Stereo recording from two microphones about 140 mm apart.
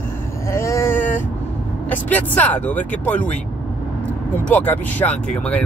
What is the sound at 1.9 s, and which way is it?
Speech, 10° left (ahead or behind).